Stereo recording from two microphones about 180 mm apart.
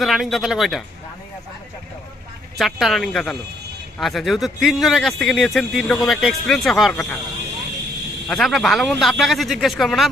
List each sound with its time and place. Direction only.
0.0 s a man's voice: centre (ahead or behind)
2.6 s a man's voice: centre (ahead or behind)
8.3 s a man's voice: centre (ahead or behind)